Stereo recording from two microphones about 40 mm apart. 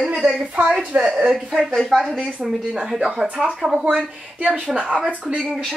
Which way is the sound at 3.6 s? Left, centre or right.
Centre.